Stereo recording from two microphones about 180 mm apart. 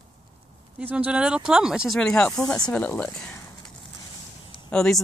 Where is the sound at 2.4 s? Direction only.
20° left (ahead or behind).